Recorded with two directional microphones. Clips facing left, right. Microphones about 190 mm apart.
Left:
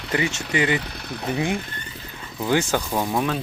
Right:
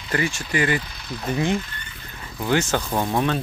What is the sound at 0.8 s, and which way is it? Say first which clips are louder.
Engine: left 2 dB; 60° left (ahead or behind).